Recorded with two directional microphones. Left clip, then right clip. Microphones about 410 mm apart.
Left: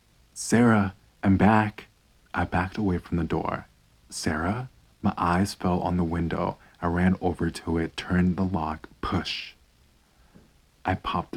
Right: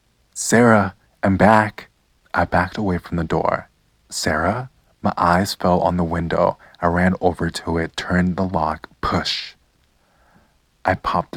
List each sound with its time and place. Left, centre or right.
0.3 s speech: centre
10.8 s speech: centre